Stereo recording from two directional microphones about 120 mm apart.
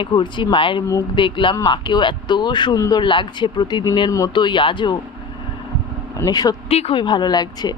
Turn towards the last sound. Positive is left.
turn(degrees=35)  # may be behind; listen again after turning